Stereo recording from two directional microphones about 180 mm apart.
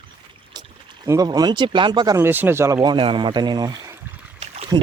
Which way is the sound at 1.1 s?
20° right (ahead or behind).